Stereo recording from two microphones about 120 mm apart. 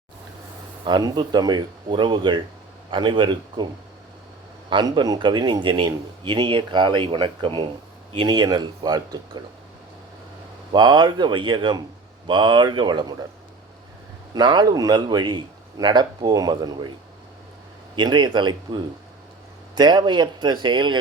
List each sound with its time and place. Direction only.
0.9 s speech: 35° right (ahead or behind)
4.7 s speech: 40° right (ahead or behind)
10.7 s speech: 40° right (ahead or behind)
14.3 s speech: 35° right (ahead or behind)
17.9 s speech: 40° right (ahead or behind)